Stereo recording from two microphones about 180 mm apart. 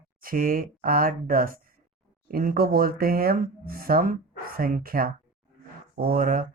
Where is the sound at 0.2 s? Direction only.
50° right (ahead or behind).